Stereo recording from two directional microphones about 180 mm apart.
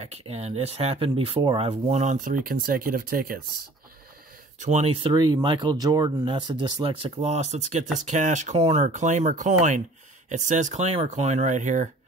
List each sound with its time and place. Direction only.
0.0 s speech: 35° right (ahead or behind); by 3.3 s 55° right (ahead or behind)
4.6 s speech: 40° right (ahead or behind)